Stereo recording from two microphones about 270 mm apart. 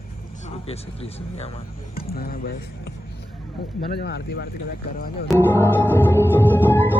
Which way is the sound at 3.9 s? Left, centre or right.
Left.